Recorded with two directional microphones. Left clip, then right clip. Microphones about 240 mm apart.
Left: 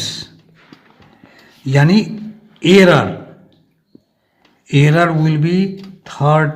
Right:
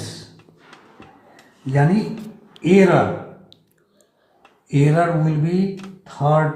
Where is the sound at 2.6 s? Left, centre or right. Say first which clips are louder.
Left 6 dB; left.